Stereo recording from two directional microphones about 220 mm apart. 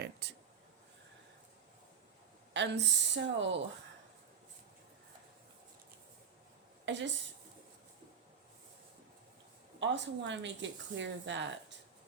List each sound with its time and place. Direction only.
0.0 s a sound: 50° right (ahead or behind)
2.5 s speech: 50° right (ahead or behind)
6.8 s a woman's voice: 55° right (ahead or behind)
9.8 s speech: 55° right (ahead or behind)